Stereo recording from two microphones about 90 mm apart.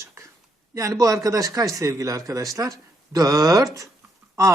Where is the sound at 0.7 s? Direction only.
35° right (ahead or behind).